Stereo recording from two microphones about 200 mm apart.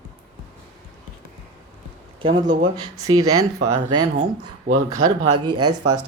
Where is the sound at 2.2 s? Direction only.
25° right (ahead or behind).